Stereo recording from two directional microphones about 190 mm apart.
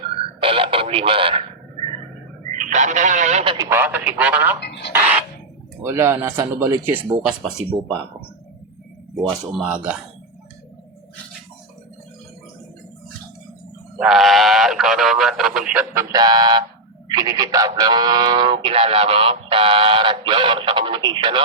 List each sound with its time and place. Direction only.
0.4 s radio: 30° right (ahead or behind)
2.5 s speech: 40° right (ahead or behind)
3.7 s speech: 10° right (ahead or behind)
4.6 s a sound: 65° left (ahead or behind)
5.8 s speech: 15° right (ahead or behind)
9.1 s speech: 5° right (ahead or behind)
14.0 s speech: centre (ahead or behind)
16.1 s speech: 20° right (ahead or behind)